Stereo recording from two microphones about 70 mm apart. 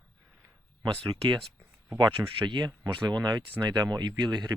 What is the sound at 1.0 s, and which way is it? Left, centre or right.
Speech, right.